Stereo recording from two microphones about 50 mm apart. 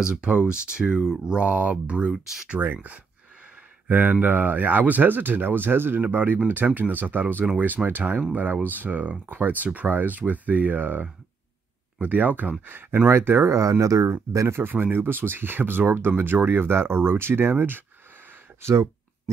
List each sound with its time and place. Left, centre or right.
0.1 s speech: right
2.5 s speech: right
13.5 s speech: right
14.6 s speech: right
18.6 s a sound: right